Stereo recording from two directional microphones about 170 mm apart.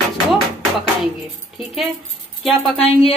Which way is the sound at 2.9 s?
35° left (ahead or behind).